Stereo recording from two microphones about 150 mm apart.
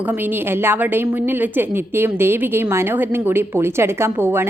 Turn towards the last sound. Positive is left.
turn(degrees=-15)  # may be behind; listen again after turning